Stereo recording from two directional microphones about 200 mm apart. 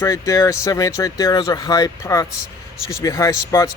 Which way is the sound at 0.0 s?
15° left (ahead or behind).